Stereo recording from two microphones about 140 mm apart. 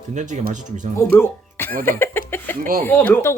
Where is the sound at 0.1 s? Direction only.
60° right (ahead or behind).